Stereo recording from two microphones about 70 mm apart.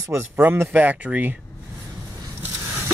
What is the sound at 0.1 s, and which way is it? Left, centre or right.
Speech, right.